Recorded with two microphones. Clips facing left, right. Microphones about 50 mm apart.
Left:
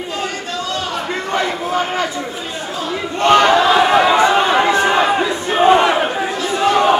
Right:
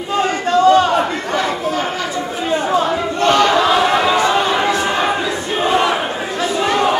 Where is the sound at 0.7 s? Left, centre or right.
Right.